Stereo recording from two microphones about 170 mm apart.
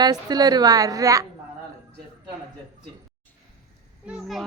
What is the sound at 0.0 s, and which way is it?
A woman's voice, 25° right (ahead or behind).